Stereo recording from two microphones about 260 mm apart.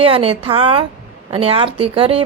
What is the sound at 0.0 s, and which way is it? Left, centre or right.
A woman's voice, right.